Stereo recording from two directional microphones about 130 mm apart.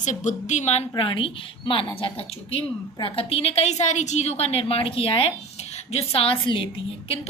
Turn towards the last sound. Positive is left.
turn(degrees=40)  # may be behind; listen again after turning